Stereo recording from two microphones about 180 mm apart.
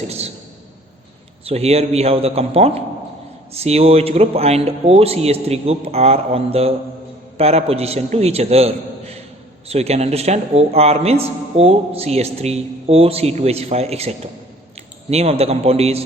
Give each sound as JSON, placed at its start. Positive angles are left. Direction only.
{"t": 1.5, "sound": "a man's voice", "side_deg": -35}